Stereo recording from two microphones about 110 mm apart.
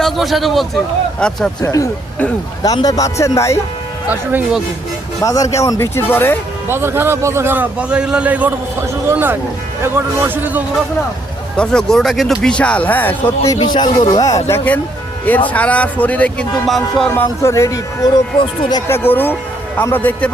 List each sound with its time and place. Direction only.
0.0 s a man's voice: centre (ahead or behind)
1.6 s speech: 30° left (ahead or behind)
4.1 s a man's voice: 15° right (ahead or behind)
5.2 s a man's voice: 30° left (ahead or behind)
5.8 s speech: 20° left (ahead or behind)
6.7 s a man's voice: 20° right (ahead or behind)
11.5 s speech: 10° left (ahead or behind)
13.4 s a man's voice: 35° left (ahead or behind)
14.4 s speech: 20° left (ahead or behind)
16.6 s music: centre (ahead or behind)
17.2 s speech: 25° left (ahead or behind)
18.9 s speech: 20° left (ahead or behind)